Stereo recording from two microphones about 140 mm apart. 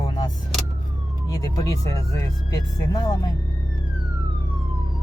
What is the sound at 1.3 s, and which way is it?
Speech, 25° left (ahead or behind).